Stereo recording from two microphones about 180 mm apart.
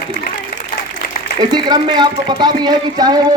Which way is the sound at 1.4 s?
25° right (ahead or behind).